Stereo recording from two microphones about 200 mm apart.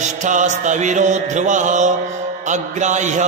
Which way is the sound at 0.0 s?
35° right (ahead or behind).